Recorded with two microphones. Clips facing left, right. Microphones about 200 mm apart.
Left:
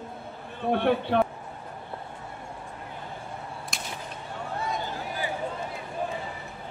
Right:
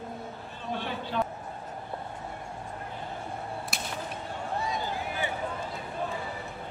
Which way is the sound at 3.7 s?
5° right (ahead or behind).